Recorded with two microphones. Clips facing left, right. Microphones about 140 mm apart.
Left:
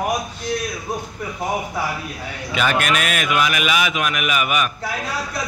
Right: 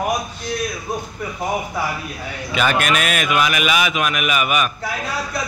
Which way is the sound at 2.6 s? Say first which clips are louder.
Right 1 dB; 15° right (ahead or behind).